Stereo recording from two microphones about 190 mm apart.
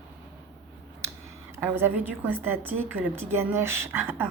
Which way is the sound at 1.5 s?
10° right (ahead or behind).